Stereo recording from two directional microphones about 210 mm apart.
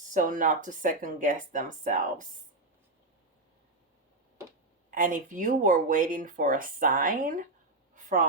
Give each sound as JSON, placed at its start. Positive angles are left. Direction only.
{"t": 0.1, "sound": "speech", "side_deg": -40}
{"t": 4.9, "sound": "speech", "side_deg": -40}